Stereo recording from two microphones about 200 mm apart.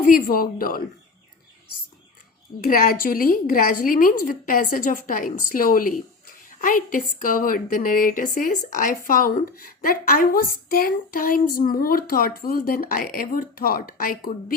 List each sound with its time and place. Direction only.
0.0 s a woman's voice: 45° left (ahead or behind)
2.6 s a woman's voice: 45° left (ahead or behind)